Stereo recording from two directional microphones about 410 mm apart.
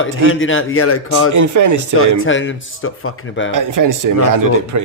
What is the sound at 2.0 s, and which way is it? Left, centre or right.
Speech, left.